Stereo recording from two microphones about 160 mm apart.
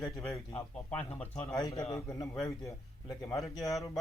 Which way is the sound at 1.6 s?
20° left (ahead or behind).